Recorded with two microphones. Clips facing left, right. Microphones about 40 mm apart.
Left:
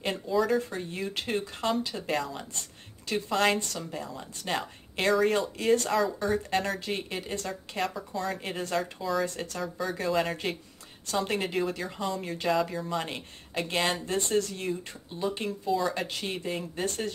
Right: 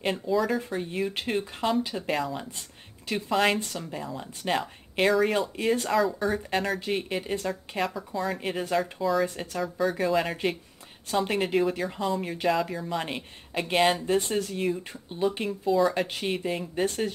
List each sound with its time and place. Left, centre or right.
0.3 s speech: centre
9.6 s speech: centre